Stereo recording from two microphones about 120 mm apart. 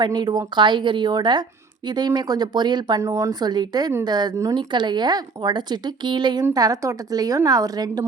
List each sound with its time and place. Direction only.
0.0 s speech: 35° right (ahead or behind)
3.0 s speech: 25° right (ahead or behind)